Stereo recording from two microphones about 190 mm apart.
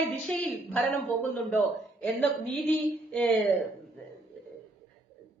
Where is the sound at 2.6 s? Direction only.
10° left (ahead or behind).